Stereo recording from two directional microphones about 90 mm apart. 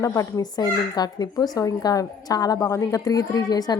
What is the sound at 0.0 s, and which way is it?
A woman's voice, 40° left (ahead or behind).